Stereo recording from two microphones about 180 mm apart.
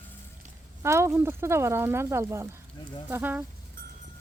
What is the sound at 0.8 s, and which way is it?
Speech, 15° right (ahead or behind).